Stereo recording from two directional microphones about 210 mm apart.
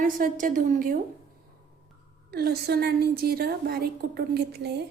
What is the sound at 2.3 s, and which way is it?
A woman's voice, 50° right (ahead or behind).